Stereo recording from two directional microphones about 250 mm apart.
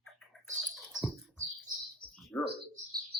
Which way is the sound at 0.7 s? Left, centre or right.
Centre.